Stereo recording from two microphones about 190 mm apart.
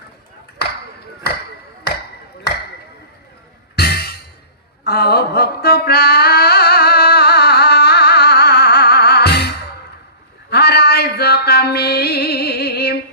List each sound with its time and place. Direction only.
0.6 s chop: 60° left (ahead or behind)
3.8 s music: 55° left (ahead or behind)
4.8 s mantra: 55° left (ahead or behind)
10.5 s music: 60° left (ahead or behind)